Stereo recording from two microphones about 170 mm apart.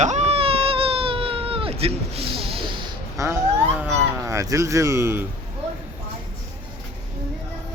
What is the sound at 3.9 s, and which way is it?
Speech, 15° right (ahead or behind).